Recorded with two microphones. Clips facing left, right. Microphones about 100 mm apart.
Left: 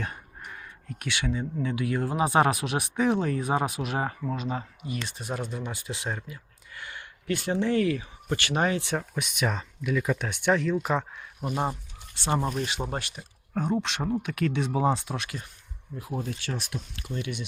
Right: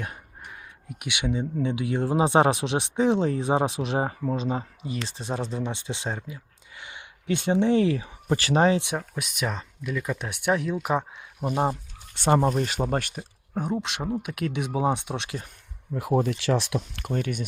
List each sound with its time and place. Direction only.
0.0 s speech: 10° right (ahead or behind)
9.0 s speech: centre (ahead or behind); by 11.8 s 20° right (ahead or behind)
12.1 s speech: 55° right (ahead or behind)
12.4 s speech: 40° right (ahead or behind)
13.5 s speech: 10° right (ahead or behind)
14.9 s speech: 25° right (ahead or behind)
16.0 s speech: 80° right
17.0 s speech: 50° right (ahead or behind)